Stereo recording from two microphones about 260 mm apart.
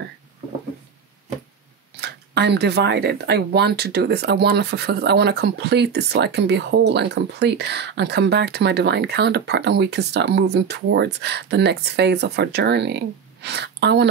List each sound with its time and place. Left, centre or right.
2.0 s speech: right